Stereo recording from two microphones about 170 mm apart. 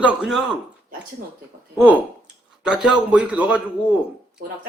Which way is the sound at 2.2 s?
5° right (ahead or behind).